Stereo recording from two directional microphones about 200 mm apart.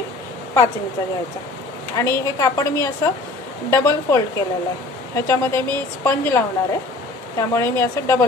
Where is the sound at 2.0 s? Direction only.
15° left (ahead or behind).